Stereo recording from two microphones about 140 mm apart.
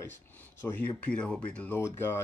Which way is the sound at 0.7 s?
10° left (ahead or behind).